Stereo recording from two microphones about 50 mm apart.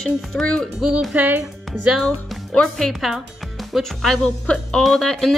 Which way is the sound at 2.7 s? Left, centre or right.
Centre.